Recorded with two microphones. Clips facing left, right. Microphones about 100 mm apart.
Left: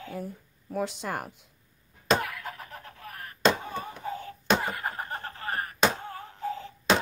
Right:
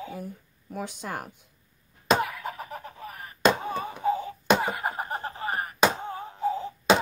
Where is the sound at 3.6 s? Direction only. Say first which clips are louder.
Right 8 dB; 15° right (ahead or behind).